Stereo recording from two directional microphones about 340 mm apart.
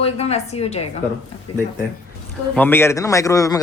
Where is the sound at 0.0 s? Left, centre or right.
Centre.